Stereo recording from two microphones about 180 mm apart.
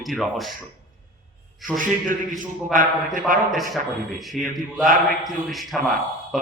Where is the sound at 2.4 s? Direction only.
45° right (ahead or behind).